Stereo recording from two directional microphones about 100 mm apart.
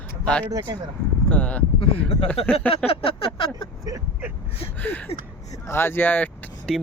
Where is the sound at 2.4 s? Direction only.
85° left.